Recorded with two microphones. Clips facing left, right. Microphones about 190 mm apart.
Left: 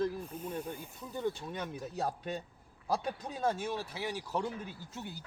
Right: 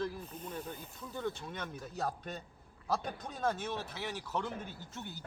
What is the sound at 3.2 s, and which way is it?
Speech, 10° left (ahead or behind).